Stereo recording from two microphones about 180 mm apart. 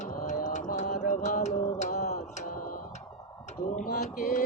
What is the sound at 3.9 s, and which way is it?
Mantra, 55° left (ahead or behind).